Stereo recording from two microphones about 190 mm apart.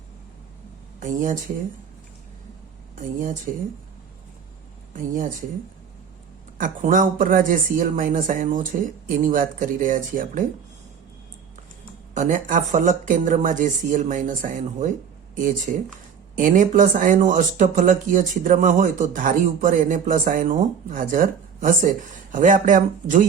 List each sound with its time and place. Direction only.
0.9 s speech: 40° right (ahead or behind)
4.9 s speech: 45° right (ahead or behind)
6.6 s speech: 45° right (ahead or behind)
12.1 s speech: 40° right (ahead or behind)